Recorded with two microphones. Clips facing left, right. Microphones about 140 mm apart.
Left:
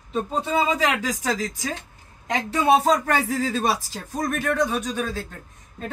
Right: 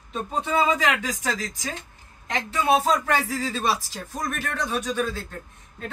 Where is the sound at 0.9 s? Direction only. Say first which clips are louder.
Left 2 dB; 35° left (ahead or behind).